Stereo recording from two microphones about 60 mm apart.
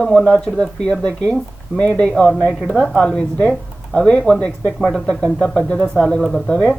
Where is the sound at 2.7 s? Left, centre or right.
Centre.